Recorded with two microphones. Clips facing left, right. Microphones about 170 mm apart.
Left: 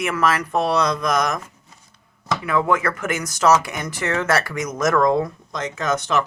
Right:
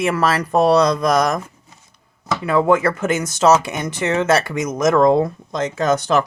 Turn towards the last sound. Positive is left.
turn(degrees=-35)  # may be behind; listen again after turning